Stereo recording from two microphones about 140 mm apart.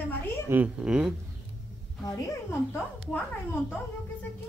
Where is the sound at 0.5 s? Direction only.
10° right (ahead or behind).